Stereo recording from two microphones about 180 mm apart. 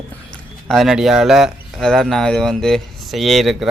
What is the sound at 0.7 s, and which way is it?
Speech, centre (ahead or behind).